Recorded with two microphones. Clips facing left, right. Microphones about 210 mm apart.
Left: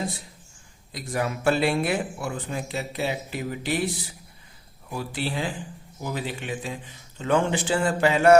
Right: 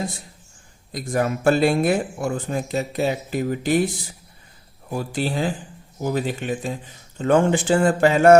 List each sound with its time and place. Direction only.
0.9 s speech: 45° right (ahead or behind)
4.9 s speech: 45° right (ahead or behind)